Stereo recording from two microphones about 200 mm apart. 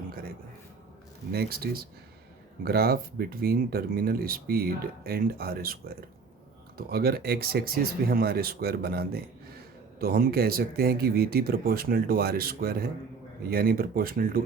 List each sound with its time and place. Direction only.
0.1 s music: 50° right (ahead or behind)
1.3 s speech: 50° right (ahead or behind)
6.7 s speech: 50° right (ahead or behind)